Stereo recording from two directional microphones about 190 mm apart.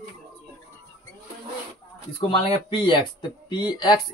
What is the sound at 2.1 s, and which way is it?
Speech, 30° left (ahead or behind).